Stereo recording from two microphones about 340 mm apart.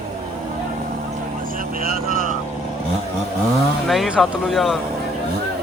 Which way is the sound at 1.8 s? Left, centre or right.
Right.